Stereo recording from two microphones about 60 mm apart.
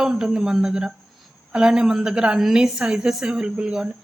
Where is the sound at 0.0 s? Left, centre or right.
Centre.